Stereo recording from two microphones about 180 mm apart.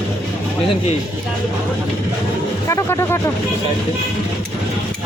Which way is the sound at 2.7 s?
15° left (ahead or behind).